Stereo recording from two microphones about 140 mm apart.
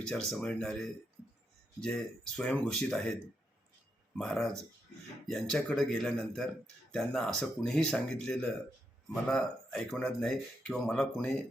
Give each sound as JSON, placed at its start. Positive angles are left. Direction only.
{"t": 0.1, "sound": "speech", "side_deg": 5}
{"t": 4.2, "sound": "speech", "side_deg": 5}